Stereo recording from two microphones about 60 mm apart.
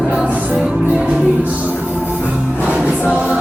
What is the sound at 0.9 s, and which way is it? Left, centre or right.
Music, right.